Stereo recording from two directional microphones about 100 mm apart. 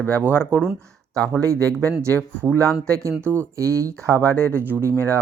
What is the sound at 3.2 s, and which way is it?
Speech, 25° right (ahead or behind).